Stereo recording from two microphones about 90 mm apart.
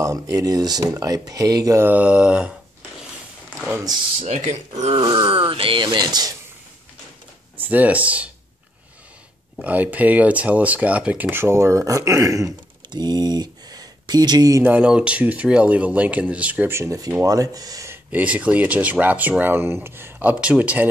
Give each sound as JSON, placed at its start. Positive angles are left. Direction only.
{"t": 0.0, "sound": "speech", "side_deg": -40}
{"t": 1.8, "sound": "speech", "side_deg": -20}
{"t": 4.9, "sound": "speech", "side_deg": -75}
{"t": 7.5, "sound": "speech", "side_deg": -20}
{"t": 9.6, "sound": "speech", "side_deg": -15}
{"t": 12.9, "sound": "speech", "side_deg": -50}
{"t": 14.6, "sound": "speech", "side_deg": -15}
{"t": 16.7, "sound": "speech", "side_deg": -35}
{"t": 18.1, "sound": "speech", "side_deg": -15}